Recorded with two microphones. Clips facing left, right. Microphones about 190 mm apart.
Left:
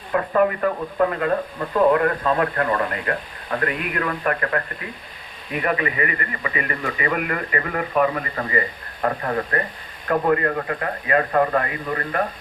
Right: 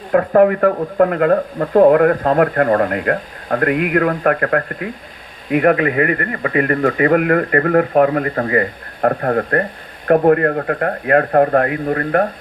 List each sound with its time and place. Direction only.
0.1 s speech: 60° right (ahead or behind)